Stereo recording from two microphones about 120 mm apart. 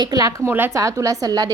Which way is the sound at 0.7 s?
25° right (ahead or behind).